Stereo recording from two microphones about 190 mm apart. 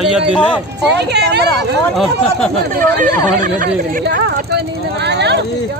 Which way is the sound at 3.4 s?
45° right (ahead or behind).